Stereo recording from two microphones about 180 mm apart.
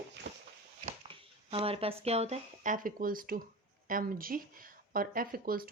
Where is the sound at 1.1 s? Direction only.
30° right (ahead or behind).